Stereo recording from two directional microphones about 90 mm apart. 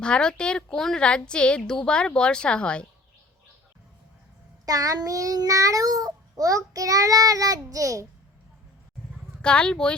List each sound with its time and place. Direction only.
0.0 s speech: 10° left (ahead or behind)
4.6 s child singing: 45° right (ahead or behind)
9.4 s speech: 10° left (ahead or behind)